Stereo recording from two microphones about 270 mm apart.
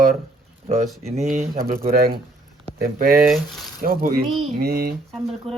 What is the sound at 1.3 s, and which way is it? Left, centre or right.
Speech, right.